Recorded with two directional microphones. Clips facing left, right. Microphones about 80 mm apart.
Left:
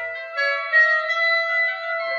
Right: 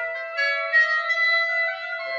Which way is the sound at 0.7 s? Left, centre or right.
Left.